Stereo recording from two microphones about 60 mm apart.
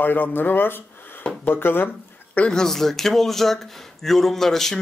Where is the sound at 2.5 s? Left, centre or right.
Centre.